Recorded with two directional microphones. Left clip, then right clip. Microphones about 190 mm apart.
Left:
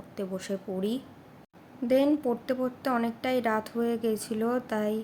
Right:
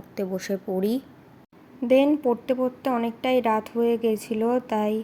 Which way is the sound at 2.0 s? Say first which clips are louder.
Right 5 dB; 10° right (ahead or behind).